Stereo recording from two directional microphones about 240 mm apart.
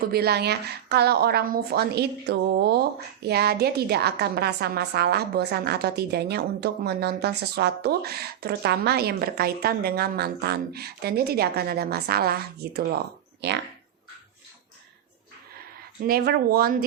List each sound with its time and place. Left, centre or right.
0.1 s a woman's voice: right
16.0 s a woman's voice: right